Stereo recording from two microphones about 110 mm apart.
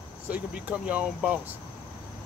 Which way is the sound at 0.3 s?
15° right (ahead or behind).